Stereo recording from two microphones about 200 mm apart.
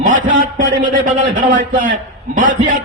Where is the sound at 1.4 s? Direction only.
40° right (ahead or behind).